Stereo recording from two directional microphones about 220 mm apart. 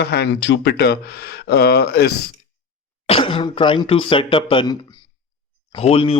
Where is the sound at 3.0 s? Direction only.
25° left (ahead or behind).